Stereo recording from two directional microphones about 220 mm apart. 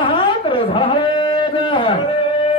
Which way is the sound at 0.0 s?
20° left (ahead or behind).